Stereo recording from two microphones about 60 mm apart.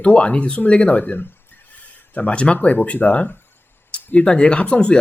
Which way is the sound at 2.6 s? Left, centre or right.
Left.